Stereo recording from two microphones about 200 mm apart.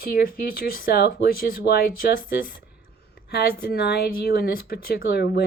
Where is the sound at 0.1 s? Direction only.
45° left (ahead or behind).